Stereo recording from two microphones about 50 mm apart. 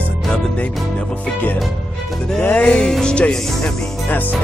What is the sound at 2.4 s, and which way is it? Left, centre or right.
Music, left.